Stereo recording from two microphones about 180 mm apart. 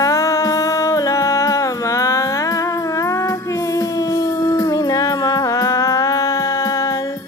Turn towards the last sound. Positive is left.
turn(degrees=20)  # may be behind; listen again after turning